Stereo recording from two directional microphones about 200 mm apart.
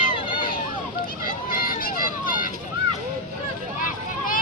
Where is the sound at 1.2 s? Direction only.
45° left (ahead or behind).